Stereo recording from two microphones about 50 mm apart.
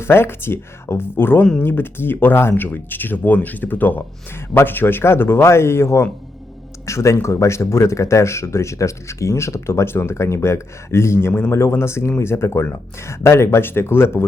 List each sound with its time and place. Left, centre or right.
0.0 s speech: left
2.6 s speech: left
4.4 s speech: left
6.8 s speech: left
11.5 s speech: left